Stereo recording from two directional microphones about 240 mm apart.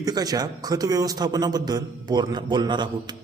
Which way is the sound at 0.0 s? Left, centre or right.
Centre.